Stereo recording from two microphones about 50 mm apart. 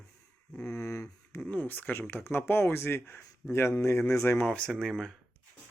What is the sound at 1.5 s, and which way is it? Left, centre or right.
Speech, left.